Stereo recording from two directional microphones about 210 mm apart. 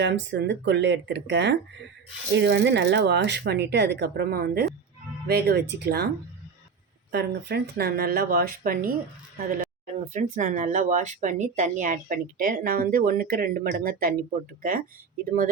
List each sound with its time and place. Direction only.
0.0 s speech: 55° right (ahead or behind)
7.1 s speech: 50° right (ahead or behind)